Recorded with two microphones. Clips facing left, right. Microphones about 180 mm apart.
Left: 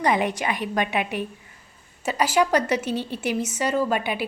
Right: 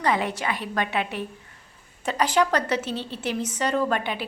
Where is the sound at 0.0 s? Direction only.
15° left (ahead or behind).